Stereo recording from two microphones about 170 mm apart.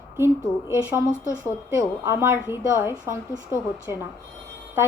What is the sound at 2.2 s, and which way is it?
Speech, 15° right (ahead or behind).